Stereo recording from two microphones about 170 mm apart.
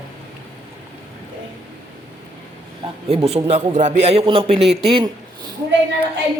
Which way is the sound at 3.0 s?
35° right (ahead or behind).